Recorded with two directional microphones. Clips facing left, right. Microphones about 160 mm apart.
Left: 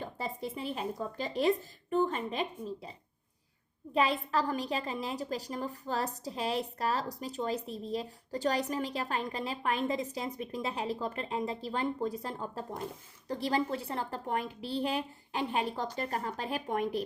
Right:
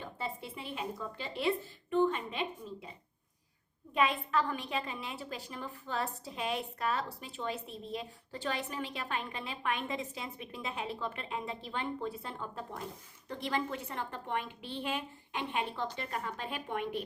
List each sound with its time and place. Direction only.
0.0 s speech: 40° left (ahead or behind)
3.9 s a woman's voice: 35° left (ahead or behind)